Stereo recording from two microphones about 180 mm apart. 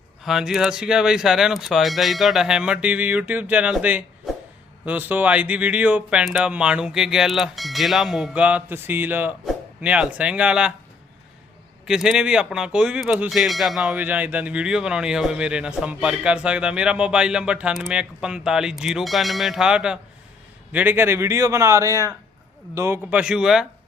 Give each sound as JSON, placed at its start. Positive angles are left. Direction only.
{"t": 0.3, "sound": "speech", "side_deg": -5}
{"t": 11.9, "sound": "speech", "side_deg": -5}
{"t": 21.8, "sound": "speech", "side_deg": 15}
{"t": 22.7, "sound": "speech", "side_deg": -15}